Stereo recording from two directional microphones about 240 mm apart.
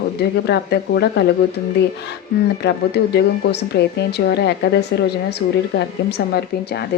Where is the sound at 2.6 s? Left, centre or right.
Left.